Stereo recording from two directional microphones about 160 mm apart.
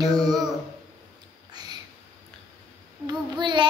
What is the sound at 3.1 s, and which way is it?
Speech, 30° right (ahead or behind).